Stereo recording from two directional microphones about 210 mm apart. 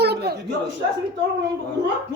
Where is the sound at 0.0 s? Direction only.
50° right (ahead or behind).